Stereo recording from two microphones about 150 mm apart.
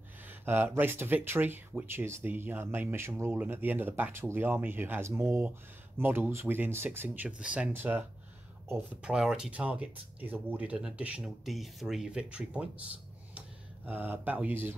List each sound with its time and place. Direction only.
0.3 s speech: 15° right (ahead or behind)
9.1 s speech: 5° right (ahead or behind)
13.8 s speech: 10° right (ahead or behind)